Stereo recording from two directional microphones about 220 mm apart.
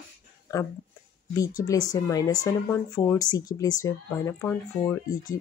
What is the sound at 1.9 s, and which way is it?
Speech, 15° left (ahead or behind).